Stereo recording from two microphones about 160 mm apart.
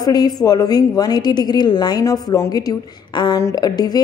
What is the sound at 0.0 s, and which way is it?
A woman's voice, 25° left (ahead or behind).